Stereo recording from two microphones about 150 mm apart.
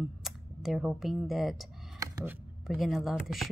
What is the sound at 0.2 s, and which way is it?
Speech, centre (ahead or behind).